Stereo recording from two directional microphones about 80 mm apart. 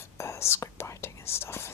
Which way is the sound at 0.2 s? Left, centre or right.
Left.